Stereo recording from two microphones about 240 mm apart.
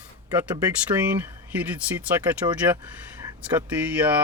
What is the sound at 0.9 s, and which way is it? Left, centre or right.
Speech, centre.